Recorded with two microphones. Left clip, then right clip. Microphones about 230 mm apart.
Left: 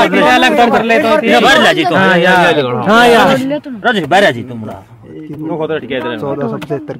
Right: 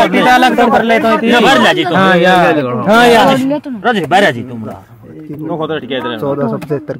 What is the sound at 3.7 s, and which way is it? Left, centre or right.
Speech, left.